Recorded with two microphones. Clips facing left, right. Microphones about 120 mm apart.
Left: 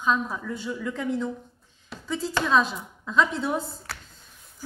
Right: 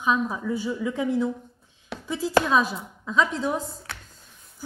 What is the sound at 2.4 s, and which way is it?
Speech, 5° right (ahead or behind).